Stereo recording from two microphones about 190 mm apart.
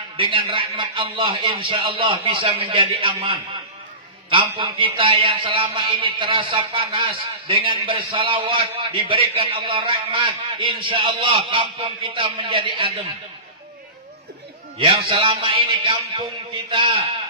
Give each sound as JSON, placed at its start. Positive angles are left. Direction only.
{"t": 0.2, "sound": "a man's voice", "side_deg": -25}
{"t": 14.8, "sound": "a man's voice", "side_deg": -25}